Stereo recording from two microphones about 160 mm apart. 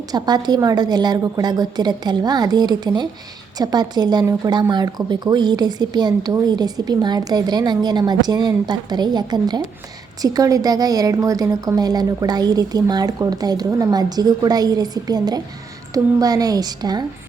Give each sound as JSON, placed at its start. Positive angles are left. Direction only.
{"t": 0.1, "sound": "a woman's voice", "side_deg": -25}